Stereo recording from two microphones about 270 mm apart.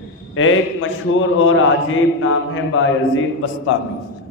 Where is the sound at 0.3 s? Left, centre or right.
Left.